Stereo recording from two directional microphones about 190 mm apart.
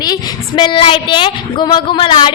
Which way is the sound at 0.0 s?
20° left (ahead or behind).